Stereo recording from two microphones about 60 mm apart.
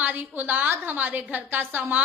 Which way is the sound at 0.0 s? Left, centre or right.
Right.